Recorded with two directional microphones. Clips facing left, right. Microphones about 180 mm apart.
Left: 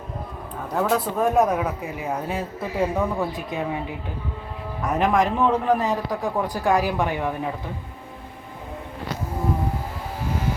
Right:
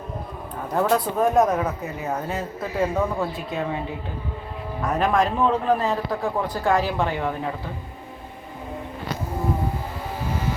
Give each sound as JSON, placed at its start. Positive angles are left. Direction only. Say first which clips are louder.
{"t": 0.7, "sound": "speech", "louder": "right 1 dB", "side_deg": 0}
{"t": 2.9, "sound": "speech", "louder": "even", "side_deg": 0}
{"t": 3.3, "sound": "speech", "louder": "even", "side_deg": 15}
{"t": 4.9, "sound": "speech", "louder": "left 1 dB", "side_deg": 15}